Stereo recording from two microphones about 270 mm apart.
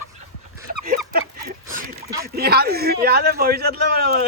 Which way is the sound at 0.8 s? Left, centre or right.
Right.